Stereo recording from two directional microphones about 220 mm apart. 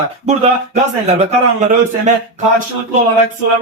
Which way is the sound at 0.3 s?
30° right (ahead or behind).